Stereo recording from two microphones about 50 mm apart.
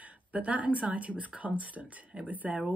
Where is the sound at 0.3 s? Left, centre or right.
Right.